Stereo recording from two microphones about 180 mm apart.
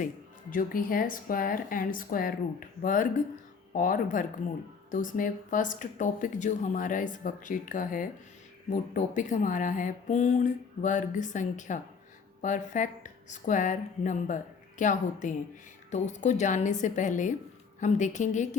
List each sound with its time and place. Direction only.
0.5 s speech: 50° left (ahead or behind)